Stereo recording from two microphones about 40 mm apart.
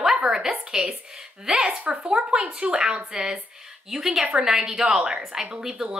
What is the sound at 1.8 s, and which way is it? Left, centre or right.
Speech, right.